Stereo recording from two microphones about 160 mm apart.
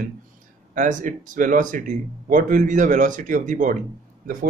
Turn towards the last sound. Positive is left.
turn(degrees=-60)  # may be behind; listen again after turning